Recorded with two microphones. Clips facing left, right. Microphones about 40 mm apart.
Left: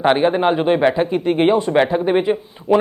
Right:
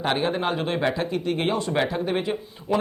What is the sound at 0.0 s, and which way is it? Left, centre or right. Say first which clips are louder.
Speech: left 9 dB; left.